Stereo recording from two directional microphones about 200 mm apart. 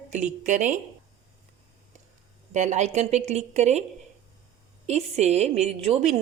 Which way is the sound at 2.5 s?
35° right (ahead or behind).